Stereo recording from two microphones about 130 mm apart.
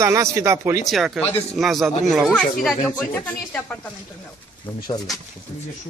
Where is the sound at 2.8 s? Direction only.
10° left (ahead or behind).